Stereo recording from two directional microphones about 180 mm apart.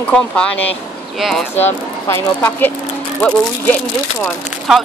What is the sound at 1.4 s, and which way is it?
Speech, 10° left (ahead or behind).